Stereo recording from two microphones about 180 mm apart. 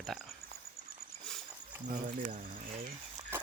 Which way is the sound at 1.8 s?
45° right (ahead or behind).